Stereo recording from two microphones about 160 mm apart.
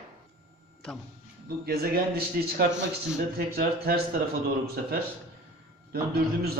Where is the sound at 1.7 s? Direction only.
75° right (ahead or behind).